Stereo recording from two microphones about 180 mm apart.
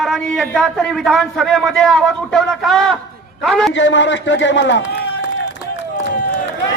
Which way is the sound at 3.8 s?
90° left.